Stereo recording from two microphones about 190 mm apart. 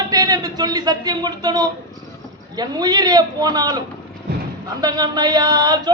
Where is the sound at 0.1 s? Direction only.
20° right (ahead or behind).